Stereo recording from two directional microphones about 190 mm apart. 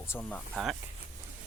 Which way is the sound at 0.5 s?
Centre (ahead or behind).